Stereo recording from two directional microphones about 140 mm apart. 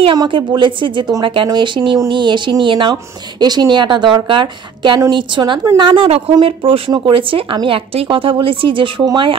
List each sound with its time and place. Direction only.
0.0 s speech: 35° right (ahead or behind)